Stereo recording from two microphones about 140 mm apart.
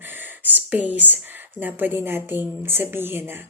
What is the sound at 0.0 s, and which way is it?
A woman's voice, 15° right (ahead or behind).